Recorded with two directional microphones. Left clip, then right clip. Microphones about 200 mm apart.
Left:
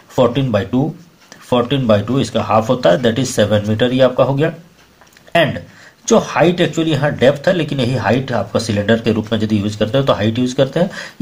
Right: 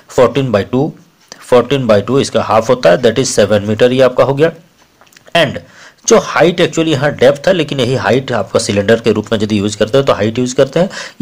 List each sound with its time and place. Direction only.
0.1 s speech: 45° right (ahead or behind)
6.0 s speech: 40° right (ahead or behind)